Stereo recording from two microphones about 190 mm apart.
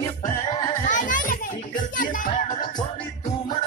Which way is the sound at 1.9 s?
45° left (ahead or behind).